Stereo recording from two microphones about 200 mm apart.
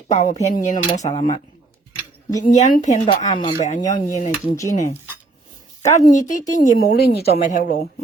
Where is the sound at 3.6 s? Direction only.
35° left (ahead or behind).